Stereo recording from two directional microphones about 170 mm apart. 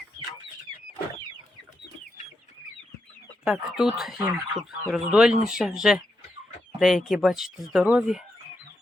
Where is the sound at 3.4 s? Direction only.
Centre (ahead or behind).